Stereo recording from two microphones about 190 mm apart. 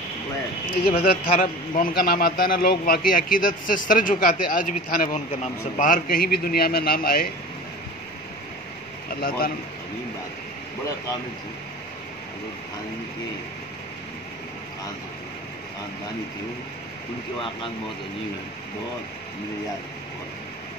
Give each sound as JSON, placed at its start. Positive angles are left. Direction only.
{"t": 1.0, "sound": "speech", "side_deg": 50}
{"t": 9.1, "sound": "speech", "side_deg": 50}